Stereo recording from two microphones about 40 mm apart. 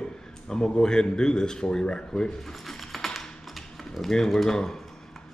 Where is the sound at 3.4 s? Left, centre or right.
Centre.